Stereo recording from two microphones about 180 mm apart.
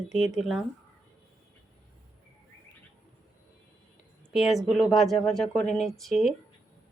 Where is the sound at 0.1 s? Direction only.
5° right (ahead or behind).